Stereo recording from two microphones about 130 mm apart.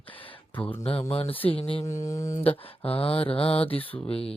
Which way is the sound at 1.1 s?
45° left (ahead or behind).